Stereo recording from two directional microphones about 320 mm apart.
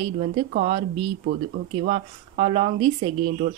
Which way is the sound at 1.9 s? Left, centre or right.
Centre.